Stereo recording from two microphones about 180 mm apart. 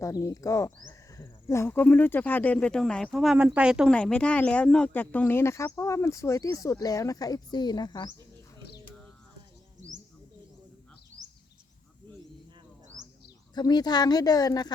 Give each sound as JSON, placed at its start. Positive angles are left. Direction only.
{"t": 0.0, "sound": "speech", "side_deg": 15}
{"t": 3.9, "sound": "speech", "side_deg": 5}
{"t": 13.5, "sound": "speech", "side_deg": 25}